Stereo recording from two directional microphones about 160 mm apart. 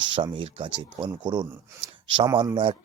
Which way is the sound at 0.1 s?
35° right (ahead or behind).